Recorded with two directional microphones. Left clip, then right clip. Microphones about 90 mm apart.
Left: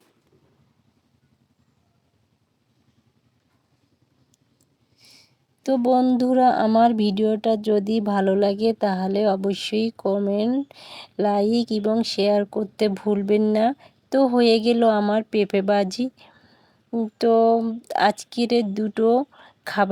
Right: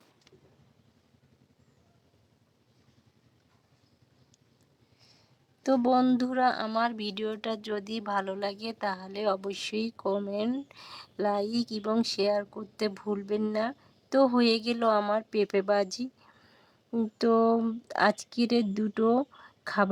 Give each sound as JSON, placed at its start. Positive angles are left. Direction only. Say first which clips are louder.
{"t": 4.9, "sound": "a sound", "louder": "left 10 dB", "side_deg": 45}
{"t": 5.6, "sound": "speech", "louder": "left 4 dB", "side_deg": 50}
{"t": 5.9, "sound": "speech", "louder": "left 7 dB", "side_deg": 35}
{"t": 10.4, "sound": "speech", "louder": "left 9 dB", "side_deg": -25}
{"t": 10.7, "sound": "speech", "louder": "left 6 dB", "side_deg": 40}
{"t": 16.3, "sound": "whispering", "louder": "left 4 dB", "side_deg": 25}
{"t": 17.2, "sound": "speech", "louder": "left 8 dB", "side_deg": 50}
{"t": 19.5, "sound": "a sound", "louder": "left 5 dB", "side_deg": 55}